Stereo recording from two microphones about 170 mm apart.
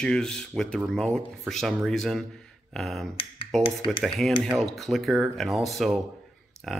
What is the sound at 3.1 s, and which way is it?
Finger snapping, 30° left (ahead or behind).